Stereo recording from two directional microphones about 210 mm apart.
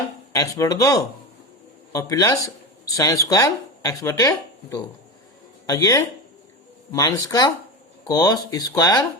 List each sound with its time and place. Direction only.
0.3 s speech: 15° left (ahead or behind)